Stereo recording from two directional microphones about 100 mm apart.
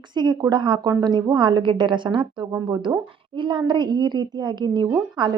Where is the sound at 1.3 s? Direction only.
45° right (ahead or behind).